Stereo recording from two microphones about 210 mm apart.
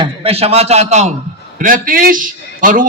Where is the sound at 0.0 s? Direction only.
25° right (ahead or behind).